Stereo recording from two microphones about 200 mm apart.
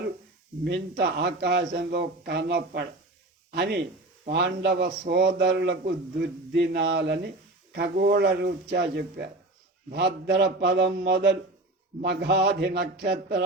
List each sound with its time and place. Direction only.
0.6 s a man's voice: 55° right (ahead or behind)